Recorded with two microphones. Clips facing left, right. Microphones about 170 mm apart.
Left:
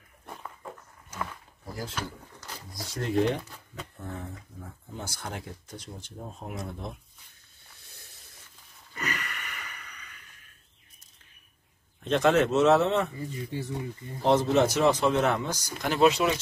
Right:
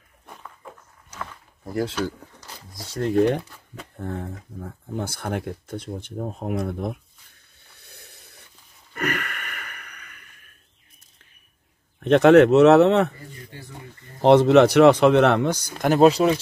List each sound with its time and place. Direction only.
1.6 s speech: 75° right (ahead or behind)
4.0 s speech: 60° right (ahead or behind)
7.9 s a sound: 65° right (ahead or behind)
12.0 s speech: 65° right (ahead or behind)
14.2 s speech: 70° right (ahead or behind); by 16.3 s 35° right (ahead or behind)